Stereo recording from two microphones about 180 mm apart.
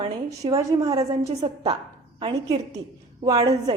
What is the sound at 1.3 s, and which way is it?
A woman's voice, 35° right (ahead or behind).